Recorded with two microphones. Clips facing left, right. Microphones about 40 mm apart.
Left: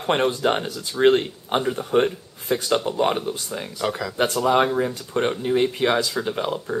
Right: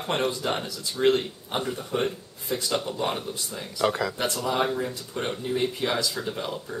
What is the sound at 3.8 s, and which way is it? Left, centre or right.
Speech, centre.